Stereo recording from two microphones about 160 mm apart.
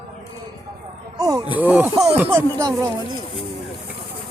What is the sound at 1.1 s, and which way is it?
Speech, 20° right (ahead or behind).